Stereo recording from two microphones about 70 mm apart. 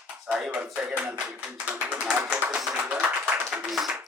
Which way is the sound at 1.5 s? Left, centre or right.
Centre.